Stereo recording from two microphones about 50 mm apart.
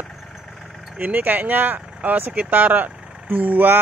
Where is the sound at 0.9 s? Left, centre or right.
Right.